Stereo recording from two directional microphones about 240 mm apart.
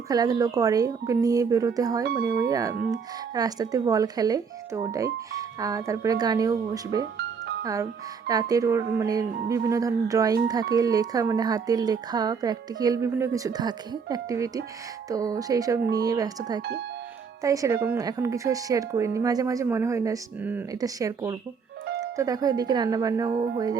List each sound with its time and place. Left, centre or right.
0.1 s speech: centre
16.6 s speech: right
17.4 s speech: centre